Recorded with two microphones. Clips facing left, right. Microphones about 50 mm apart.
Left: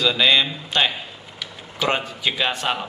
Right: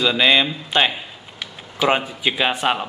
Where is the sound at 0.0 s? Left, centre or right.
Centre.